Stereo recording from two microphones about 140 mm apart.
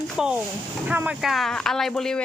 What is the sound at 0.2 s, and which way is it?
Speech, 5° right (ahead or behind).